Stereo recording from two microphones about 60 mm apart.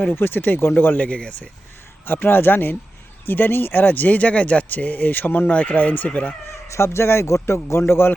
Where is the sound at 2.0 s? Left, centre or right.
Left.